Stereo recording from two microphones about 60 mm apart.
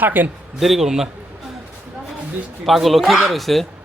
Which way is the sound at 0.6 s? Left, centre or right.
Centre.